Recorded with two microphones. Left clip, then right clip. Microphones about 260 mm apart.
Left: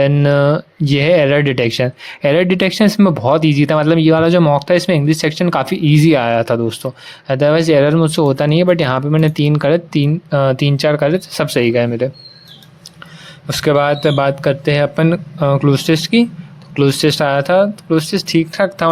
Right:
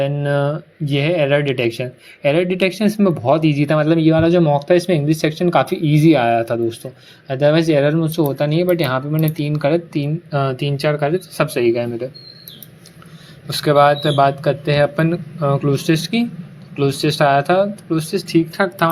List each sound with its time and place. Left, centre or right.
0.0 s speech: left
13.5 s a man's voice: left